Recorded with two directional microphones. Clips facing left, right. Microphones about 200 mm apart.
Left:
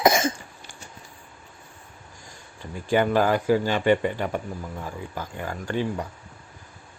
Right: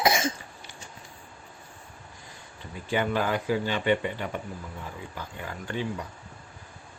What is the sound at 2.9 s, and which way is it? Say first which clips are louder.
A man's voice: left 6 dB; 45° left (ahead or behind).